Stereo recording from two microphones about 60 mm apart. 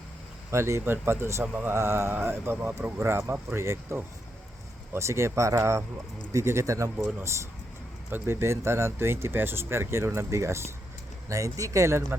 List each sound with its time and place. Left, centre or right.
0.5 s speech: right
4.9 s speech: right
8.1 s speech: right
11.3 s speech: right